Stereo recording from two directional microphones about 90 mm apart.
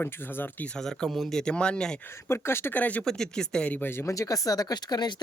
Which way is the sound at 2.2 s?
30° left (ahead or behind).